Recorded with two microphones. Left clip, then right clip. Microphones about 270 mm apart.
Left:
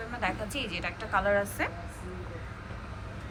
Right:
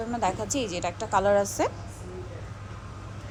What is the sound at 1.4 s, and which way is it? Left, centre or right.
Speech, centre.